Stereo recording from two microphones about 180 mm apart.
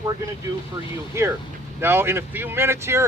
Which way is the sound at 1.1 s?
15° right (ahead or behind).